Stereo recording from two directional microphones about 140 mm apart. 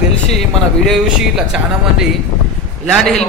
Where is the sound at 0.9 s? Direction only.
5° right (ahead or behind).